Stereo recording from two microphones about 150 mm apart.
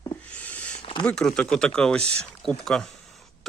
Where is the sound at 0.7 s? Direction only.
40° left (ahead or behind).